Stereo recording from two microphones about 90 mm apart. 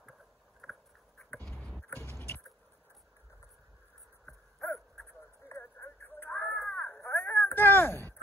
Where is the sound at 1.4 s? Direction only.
5° left (ahead or behind); by 2.4 s 20° left (ahead or behind).